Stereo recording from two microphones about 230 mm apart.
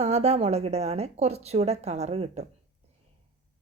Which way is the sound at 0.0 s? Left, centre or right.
Right.